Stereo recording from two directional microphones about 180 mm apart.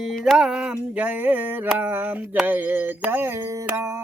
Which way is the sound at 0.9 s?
10° right (ahead or behind).